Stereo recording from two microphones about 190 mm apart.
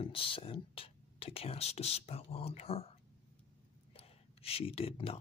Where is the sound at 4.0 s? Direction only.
30° left (ahead or behind).